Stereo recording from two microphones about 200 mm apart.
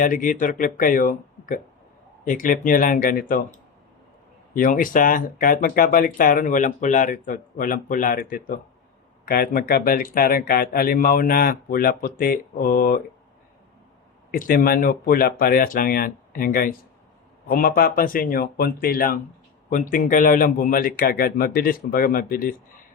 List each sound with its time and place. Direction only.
0.0 s speech: 40° left (ahead or behind)
4.5 s speech: 45° left (ahead or behind)
14.3 s speech: 45° left (ahead or behind)